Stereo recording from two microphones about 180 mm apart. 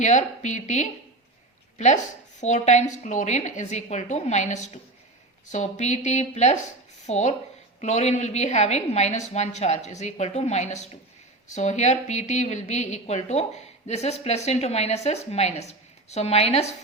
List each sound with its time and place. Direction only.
0.0 s a woman's voice: 40° left (ahead or behind)
2.4 s a woman's voice: 40° left (ahead or behind)